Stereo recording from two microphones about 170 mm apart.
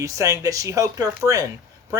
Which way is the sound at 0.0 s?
20° right (ahead or behind).